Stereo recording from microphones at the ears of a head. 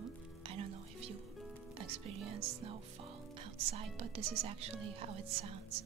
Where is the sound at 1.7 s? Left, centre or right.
Right.